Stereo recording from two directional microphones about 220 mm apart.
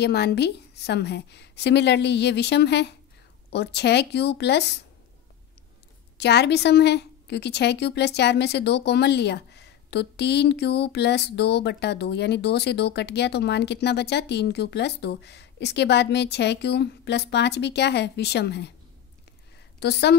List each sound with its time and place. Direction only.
0.0 s a woman's voice: 50° left (ahead or behind)
6.1 s a woman's voice: 50° left (ahead or behind)
19.8 s a woman's voice: 50° left (ahead or behind)